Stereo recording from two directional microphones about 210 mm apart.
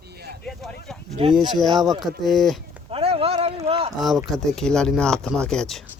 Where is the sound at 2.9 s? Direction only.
30° right (ahead or behind).